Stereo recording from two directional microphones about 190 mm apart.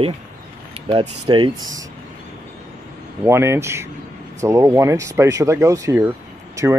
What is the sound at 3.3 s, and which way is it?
Speech, 15° right (ahead or behind).